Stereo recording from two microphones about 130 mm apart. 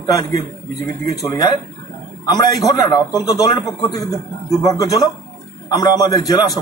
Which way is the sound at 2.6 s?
25° left (ahead or behind).